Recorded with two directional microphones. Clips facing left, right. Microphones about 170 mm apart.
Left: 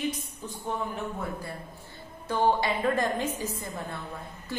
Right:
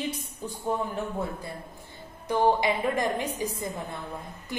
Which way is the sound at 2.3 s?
15° right (ahead or behind).